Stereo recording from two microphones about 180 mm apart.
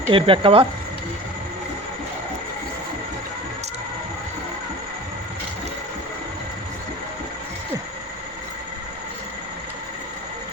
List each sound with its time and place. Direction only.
0.1 s speech: 30° right (ahead or behind)